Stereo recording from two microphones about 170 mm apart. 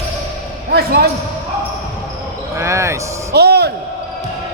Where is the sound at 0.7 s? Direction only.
70° right (ahead or behind).